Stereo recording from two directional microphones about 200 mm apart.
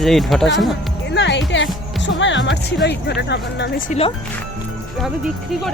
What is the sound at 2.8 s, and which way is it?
Speech, 55° left (ahead or behind).